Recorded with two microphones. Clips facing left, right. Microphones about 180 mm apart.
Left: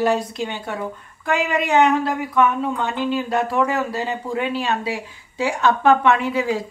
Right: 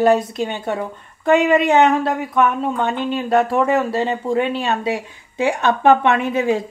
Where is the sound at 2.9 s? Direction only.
25° right (ahead or behind).